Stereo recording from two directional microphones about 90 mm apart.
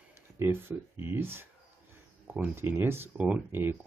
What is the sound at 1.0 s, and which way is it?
Speech, 25° right (ahead or behind).